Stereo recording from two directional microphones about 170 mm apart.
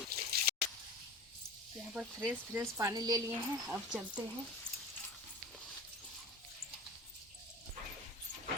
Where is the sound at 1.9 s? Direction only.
10° right (ahead or behind).